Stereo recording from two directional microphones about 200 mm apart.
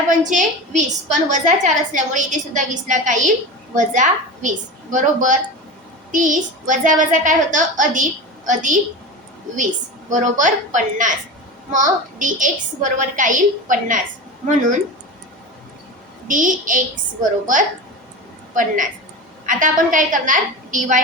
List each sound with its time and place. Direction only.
0.2 s a woman's voice: 40° right (ahead or behind)
16.2 s a woman's voice: 40° right (ahead or behind)
19.5 s a woman's voice: 40° right (ahead or behind)